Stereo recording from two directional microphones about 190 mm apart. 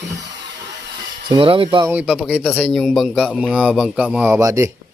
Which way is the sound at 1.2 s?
25° right (ahead or behind).